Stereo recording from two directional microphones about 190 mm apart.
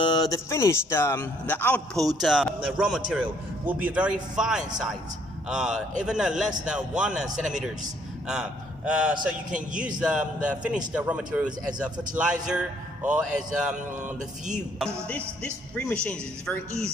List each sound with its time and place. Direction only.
0.0 s a man's voice: 20° left (ahead or behind); by 7.3 s 5° right (ahead or behind)
8.3 s a man's voice: 5° right (ahead or behind)
9.5 s a man's voice: 45° right (ahead or behind)
10.0 s a man's voice: 5° right (ahead or behind)
15.0 s a man's voice: 10° left (ahead or behind)